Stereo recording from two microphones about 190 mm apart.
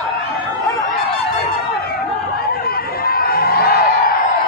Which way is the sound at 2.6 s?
55° left (ahead or behind).